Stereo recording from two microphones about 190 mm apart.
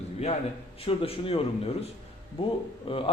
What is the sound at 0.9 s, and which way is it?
Speech, 30° left (ahead or behind).